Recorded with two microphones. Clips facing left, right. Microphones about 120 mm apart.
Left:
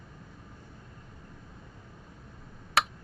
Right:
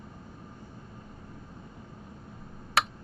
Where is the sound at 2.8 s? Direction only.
Centre (ahead or behind).